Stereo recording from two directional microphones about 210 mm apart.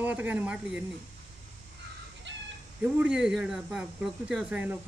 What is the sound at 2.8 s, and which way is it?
Speech, 5° right (ahead or behind).